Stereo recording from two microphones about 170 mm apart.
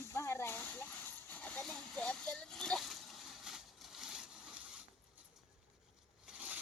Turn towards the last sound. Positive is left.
turn(degrees=-5)  # may be behind; listen again after turning